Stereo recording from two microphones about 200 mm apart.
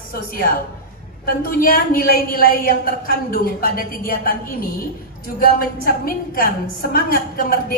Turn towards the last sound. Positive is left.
turn(degrees=45)  # may be behind; listen again after turning